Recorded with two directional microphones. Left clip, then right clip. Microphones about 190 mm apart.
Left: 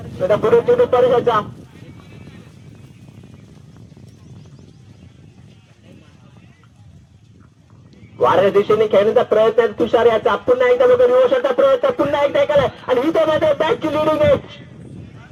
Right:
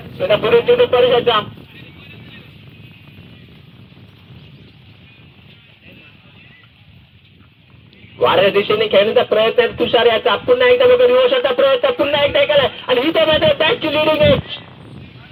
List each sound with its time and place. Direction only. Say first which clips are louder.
0.2 s speech: right 1 dB; 60° left (ahead or behind)
8.2 s speech: right 1 dB; 65° left (ahead or behind)